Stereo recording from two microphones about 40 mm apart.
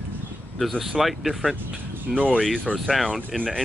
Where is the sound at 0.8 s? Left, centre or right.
Centre.